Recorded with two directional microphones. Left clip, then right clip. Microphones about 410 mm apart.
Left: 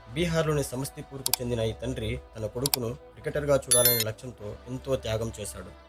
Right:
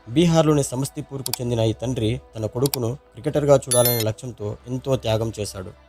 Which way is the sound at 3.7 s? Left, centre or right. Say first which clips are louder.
Right 5 dB; centre.